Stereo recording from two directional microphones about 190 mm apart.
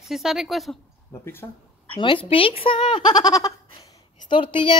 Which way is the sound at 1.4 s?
15° left (ahead or behind).